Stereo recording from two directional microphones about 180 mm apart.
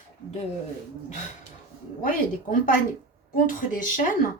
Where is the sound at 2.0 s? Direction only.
50° left (ahead or behind).